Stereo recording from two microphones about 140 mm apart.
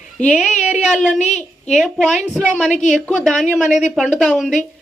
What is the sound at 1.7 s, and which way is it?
Speech, 5° left (ahead or behind).